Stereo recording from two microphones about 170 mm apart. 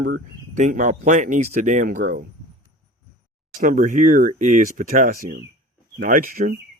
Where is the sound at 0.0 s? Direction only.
50° right (ahead or behind).